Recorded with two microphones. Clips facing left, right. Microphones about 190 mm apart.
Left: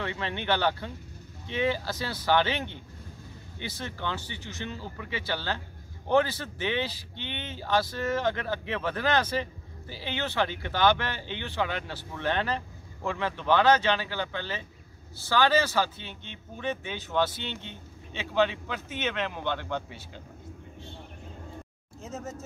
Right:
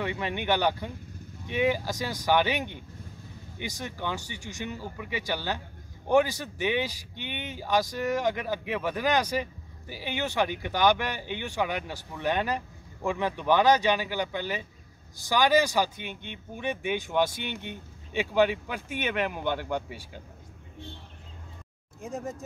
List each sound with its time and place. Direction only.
0.0 s speech: 15° right (ahead or behind)
22.0 s speech: 15° right (ahead or behind)